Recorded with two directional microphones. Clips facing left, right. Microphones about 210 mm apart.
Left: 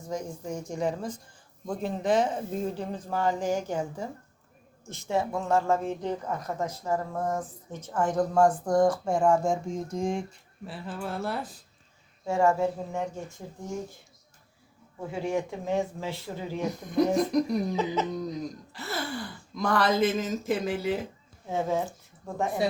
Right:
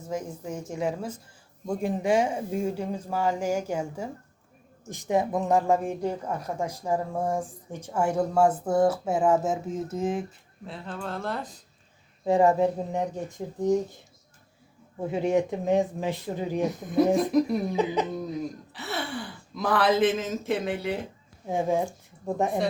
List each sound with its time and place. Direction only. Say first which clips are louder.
0.0 s speech: right 1 dB; 5° right (ahead or behind)
10.7 s speech: even; 5° left (ahead or behind)
12.2 s speech: right 3 dB; 20° right (ahead or behind)
15.0 s speech: right 5 dB; 20° right (ahead or behind)
16.6 s speech: right 2 dB; centre (ahead or behind)
17.7 s speech: right 3 dB; 15° right (ahead or behind)
18.7 s speech: right 1 dB; centre (ahead or behind)
21.5 s speech: right 3 dB; 15° right (ahead or behind)